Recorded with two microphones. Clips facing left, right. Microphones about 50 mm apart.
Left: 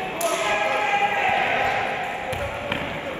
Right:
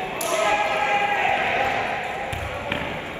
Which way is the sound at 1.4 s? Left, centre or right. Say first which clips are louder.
Even; left.